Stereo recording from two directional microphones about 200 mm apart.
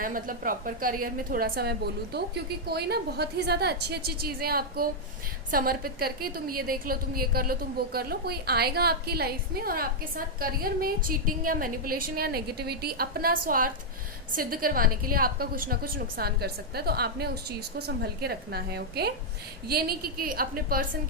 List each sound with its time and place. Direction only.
0.0 s a woman's voice: 45° right (ahead or behind)